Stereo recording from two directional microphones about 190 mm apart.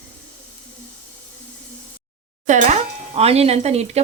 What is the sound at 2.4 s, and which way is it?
Speech, 40° right (ahead or behind).